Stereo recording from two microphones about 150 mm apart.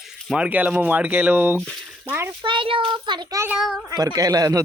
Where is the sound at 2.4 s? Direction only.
35° right (ahead or behind).